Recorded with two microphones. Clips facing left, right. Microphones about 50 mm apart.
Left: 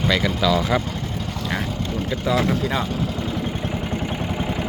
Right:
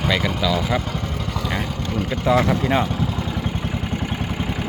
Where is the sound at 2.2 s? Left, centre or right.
Right.